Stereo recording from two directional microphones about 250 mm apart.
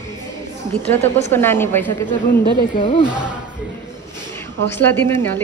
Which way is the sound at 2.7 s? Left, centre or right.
Centre.